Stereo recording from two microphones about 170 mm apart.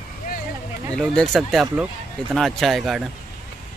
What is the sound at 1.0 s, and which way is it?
Speech, centre (ahead or behind).